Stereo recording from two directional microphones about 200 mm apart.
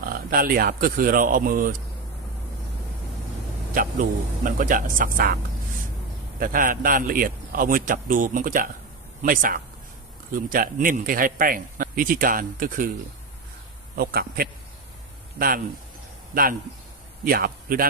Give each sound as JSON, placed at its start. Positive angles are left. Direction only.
{"t": 0.0, "sound": "speech", "side_deg": -45}
{"t": 4.4, "sound": "speech", "side_deg": -40}
{"t": 6.4, "sound": "speech", "side_deg": -45}
{"t": 13.9, "sound": "speech", "side_deg": -50}